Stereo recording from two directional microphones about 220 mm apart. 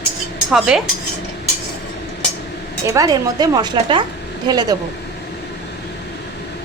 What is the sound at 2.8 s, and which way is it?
A woman's voice, 15° right (ahead or behind).